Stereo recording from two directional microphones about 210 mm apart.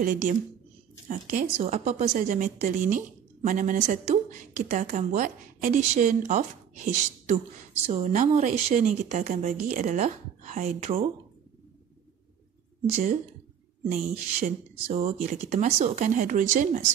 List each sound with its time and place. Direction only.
0.0 s a woman's voice: 40° right (ahead or behind)
13.8 s a woman's voice: 35° right (ahead or behind)